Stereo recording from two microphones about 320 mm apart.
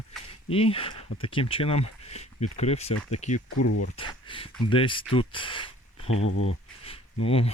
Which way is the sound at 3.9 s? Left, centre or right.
Centre.